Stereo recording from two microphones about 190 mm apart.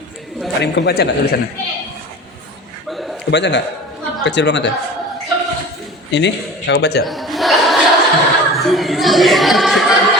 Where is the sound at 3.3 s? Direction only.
65° left (ahead or behind).